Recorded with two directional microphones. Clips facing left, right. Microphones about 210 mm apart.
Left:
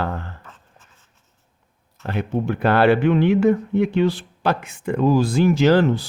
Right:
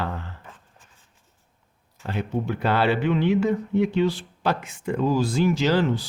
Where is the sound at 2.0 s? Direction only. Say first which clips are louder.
Left 4 dB; 55° left (ahead or behind).